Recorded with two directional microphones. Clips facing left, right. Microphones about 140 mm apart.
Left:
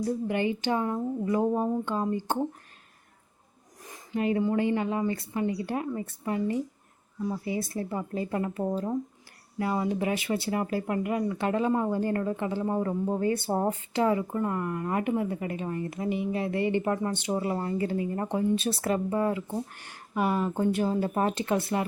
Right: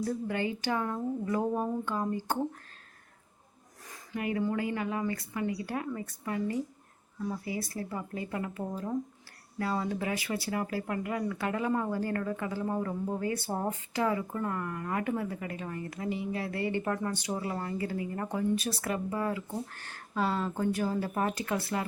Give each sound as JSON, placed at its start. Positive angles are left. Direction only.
{"t": 0.0, "sound": "speech", "side_deg": 20}
{"t": 3.8, "sound": "speech", "side_deg": 25}